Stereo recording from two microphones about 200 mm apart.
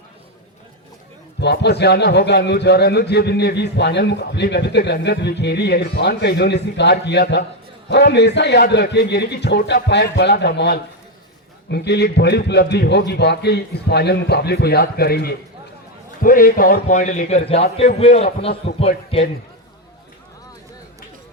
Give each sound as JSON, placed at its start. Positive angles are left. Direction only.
{"t": 1.4, "sound": "a man's voice", "side_deg": 55}